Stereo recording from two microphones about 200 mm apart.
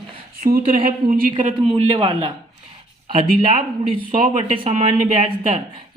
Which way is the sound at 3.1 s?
40° right (ahead or behind).